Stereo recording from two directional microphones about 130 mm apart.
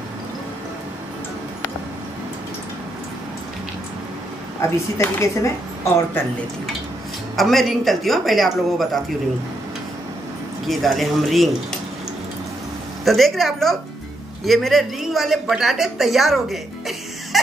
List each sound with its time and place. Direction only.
4.6 s speech: 20° left (ahead or behind)
7.3 s speech: centre (ahead or behind)
10.7 s speech: centre (ahead or behind)
13.0 s speech: centre (ahead or behind)